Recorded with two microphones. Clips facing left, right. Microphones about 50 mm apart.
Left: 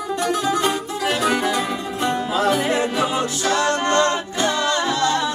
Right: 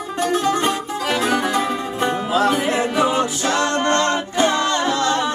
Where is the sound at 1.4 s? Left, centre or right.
Right.